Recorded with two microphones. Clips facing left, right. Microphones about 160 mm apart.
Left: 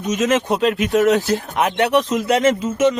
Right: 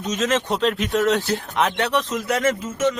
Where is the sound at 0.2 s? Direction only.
20° left (ahead or behind).